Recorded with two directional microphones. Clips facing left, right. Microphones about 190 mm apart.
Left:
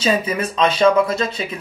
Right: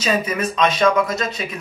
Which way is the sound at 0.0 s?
30° left (ahead or behind).